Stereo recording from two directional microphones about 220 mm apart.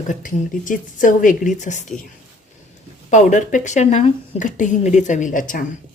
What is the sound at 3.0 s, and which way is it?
Speech, 35° left (ahead or behind).